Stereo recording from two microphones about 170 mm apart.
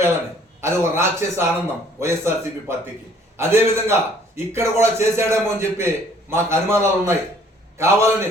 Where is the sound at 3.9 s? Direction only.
15° right (ahead or behind).